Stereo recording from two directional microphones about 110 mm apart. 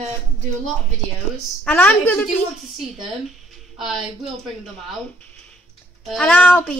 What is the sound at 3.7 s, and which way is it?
Speech, centre (ahead or behind).